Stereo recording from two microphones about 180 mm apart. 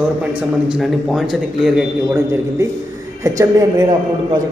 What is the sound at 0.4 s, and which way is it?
A man's voice, 5° right (ahead or behind).